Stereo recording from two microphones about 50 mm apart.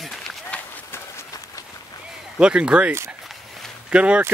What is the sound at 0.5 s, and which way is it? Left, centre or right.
Run, left.